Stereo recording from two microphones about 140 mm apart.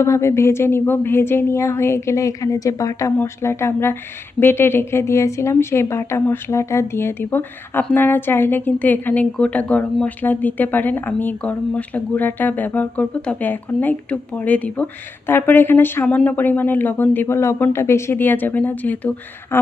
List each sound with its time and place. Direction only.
0.0 s speech: 20° left (ahead or behind)